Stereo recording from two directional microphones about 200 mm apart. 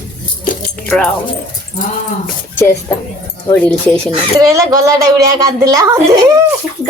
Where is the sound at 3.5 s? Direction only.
5° left (ahead or behind).